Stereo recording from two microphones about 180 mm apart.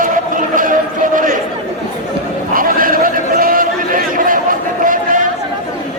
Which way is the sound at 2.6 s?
50° right (ahead or behind).